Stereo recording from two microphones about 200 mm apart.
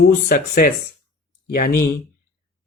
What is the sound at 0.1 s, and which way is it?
Speech, 45° left (ahead or behind).